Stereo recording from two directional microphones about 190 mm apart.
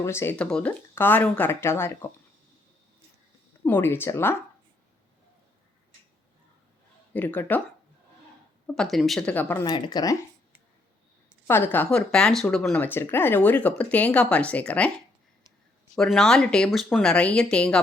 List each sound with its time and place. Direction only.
0.0 s speech: 15° left (ahead or behind)
3.6 s speech: 10° left (ahead or behind)
7.1 s speech: 10° left (ahead or behind)
8.6 s speech: 5° left (ahead or behind)
9.6 s speech: 25° left (ahead or behind)
11.4 s speech: 10° left (ahead or behind)
16.0 s speech: 5° left (ahead or behind)